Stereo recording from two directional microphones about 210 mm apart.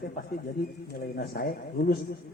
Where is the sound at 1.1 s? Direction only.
45° left (ahead or behind).